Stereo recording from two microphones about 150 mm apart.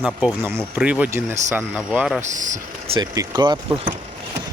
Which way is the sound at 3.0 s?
30° right (ahead or behind).